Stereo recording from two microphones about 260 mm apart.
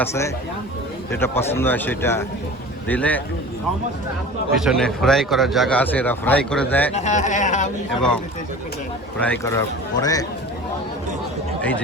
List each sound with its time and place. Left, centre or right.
0.0 s a man's voice: centre
4.5 s a man's voice: centre
6.9 s speech: left
9.1 s a man's voice: centre